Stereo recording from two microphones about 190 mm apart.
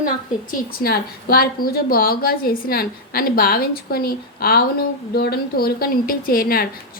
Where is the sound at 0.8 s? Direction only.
50° left (ahead or behind).